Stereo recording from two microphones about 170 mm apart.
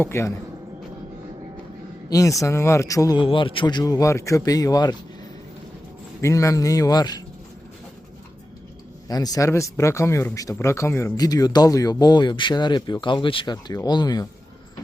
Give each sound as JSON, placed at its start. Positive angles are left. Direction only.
{"t": 0.0, "sound": "speech", "side_deg": 15}
{"t": 2.0, "sound": "speech", "side_deg": 20}
{"t": 6.2, "sound": "speech", "side_deg": 20}
{"t": 9.0, "sound": "speech", "side_deg": 20}